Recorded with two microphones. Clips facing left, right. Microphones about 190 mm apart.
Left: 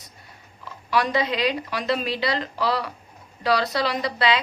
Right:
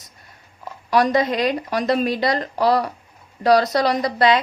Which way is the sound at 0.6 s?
45° right (ahead or behind).